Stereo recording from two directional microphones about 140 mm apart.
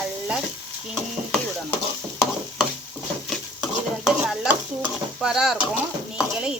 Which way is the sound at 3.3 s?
Centre (ahead or behind).